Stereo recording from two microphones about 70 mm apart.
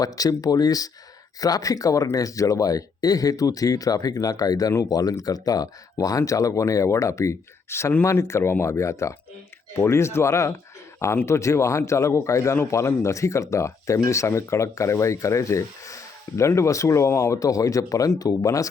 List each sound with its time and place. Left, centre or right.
0.0 s speech: left